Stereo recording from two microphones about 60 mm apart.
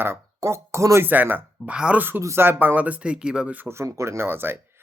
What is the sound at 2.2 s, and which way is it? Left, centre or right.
Speech, right.